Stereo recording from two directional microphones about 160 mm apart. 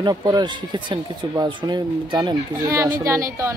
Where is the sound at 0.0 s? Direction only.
25° right (ahead or behind).